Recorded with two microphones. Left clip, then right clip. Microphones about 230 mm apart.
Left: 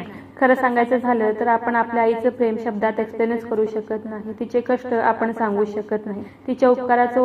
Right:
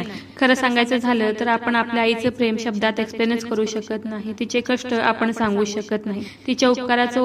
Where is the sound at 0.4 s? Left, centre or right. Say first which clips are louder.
Left 1 dB; right.